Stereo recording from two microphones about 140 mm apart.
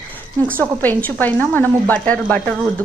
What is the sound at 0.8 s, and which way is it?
Speech, 10° left (ahead or behind).